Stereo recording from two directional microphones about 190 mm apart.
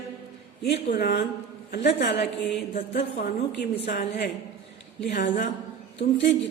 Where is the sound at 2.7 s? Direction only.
50° left (ahead or behind).